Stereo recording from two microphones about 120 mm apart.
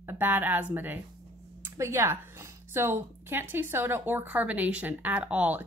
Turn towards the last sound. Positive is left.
turn(degrees=-10)  # may be behind; listen again after turning